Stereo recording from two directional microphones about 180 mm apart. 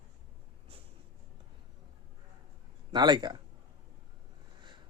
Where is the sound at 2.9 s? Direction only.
25° right (ahead or behind).